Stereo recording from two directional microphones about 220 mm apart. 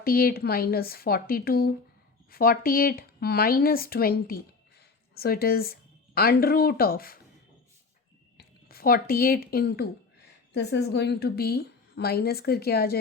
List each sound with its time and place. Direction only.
0.0 s a woman's voice: 40° left (ahead or behind)
8.4 s a woman's voice: 45° left (ahead or behind)